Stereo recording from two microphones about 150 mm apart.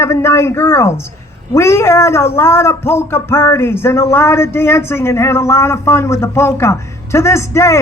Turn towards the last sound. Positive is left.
turn(degrees=20)  # may be behind; listen again after turning